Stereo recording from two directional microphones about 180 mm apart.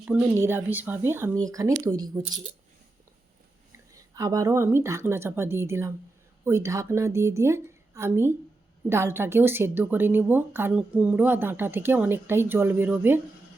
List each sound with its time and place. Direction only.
0.0 s a woman's voice: 5° right (ahead or behind)
3.9 s a woman's voice: 20° right (ahead or behind)